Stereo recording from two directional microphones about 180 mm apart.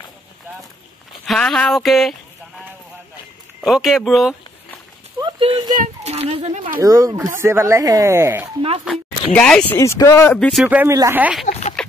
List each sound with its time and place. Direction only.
1.2 s speech: centre (ahead or behind)
3.6 s speech: centre (ahead or behind)
5.2 s a child's voice: 25° right (ahead or behind)
6.8 s speech: 20° right (ahead or behind)
8.8 s speech: centre (ahead or behind)
9.8 s speech: 15° left (ahead or behind)
10.6 s speech: 10° right (ahead or behind)
11.8 s chicken: 5° left (ahead or behind)